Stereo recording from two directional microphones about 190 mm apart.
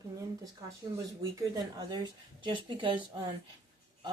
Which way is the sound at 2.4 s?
25° right (ahead or behind).